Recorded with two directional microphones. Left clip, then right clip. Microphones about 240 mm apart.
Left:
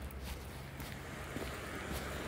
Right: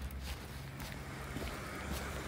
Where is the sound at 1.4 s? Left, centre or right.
Right.